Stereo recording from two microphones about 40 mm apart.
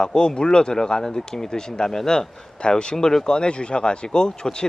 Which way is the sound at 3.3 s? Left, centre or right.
Left.